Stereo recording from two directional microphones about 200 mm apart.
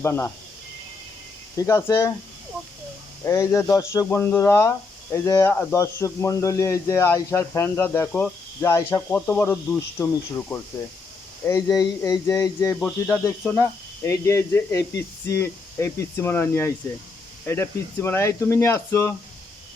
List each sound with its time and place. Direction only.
0.0 s speech: 10° left (ahead or behind)
1.5 s speech: 15° left (ahead or behind)
3.2 s speech: 15° left (ahead or behind)